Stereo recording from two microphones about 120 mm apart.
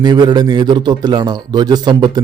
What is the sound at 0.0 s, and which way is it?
A man's voice, 35° right (ahead or behind).